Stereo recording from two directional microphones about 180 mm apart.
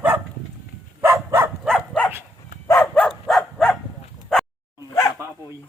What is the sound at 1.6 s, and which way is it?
Dog, 5° left (ahead or behind).